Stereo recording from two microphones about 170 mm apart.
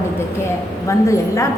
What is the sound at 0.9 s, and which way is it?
Speech, 20° left (ahead or behind).